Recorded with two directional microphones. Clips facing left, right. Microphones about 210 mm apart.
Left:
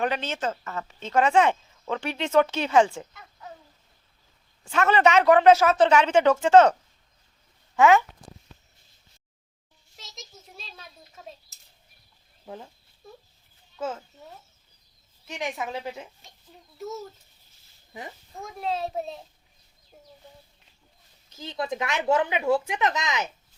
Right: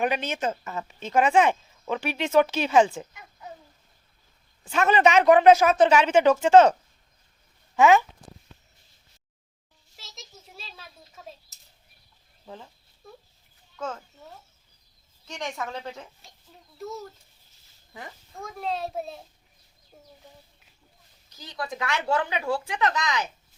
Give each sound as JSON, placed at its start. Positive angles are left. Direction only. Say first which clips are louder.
{"t": 0.0, "sound": "speech", "louder": "right 1 dB", "side_deg": -15}
{"t": 3.0, "sound": "a sound", "louder": "right 1 dB", "side_deg": -15}
{"t": 4.6, "sound": "speech", "louder": "even", "side_deg": -15}
{"t": 7.8, "sound": "speech", "louder": "even", "side_deg": -20}
{"t": 10.0, "sound": "a sound", "louder": "left 1 dB", "side_deg": 0}
{"t": 15.4, "sound": "a woman's voice", "louder": "left 2 dB", "side_deg": 15}
{"t": 16.7, "sound": "a sound", "louder": "left 1 dB", "side_deg": 0}
{"t": 17.9, "sound": "speech", "louder": "left 2 dB", "side_deg": 20}
{"t": 18.4, "sound": "a child's voice", "louder": "left 1 dB", "side_deg": 0}
{"t": 21.2, "sound": "speech", "louder": "left 4 dB", "side_deg": 25}